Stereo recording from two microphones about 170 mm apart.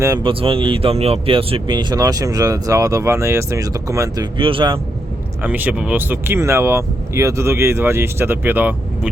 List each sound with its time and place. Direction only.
0.0 s speech: 20° right (ahead or behind)
0.3 s speech: 30° right (ahead or behind)
4.4 s speech: 30° right (ahead or behind)
5.4 s speech: 10° right (ahead or behind)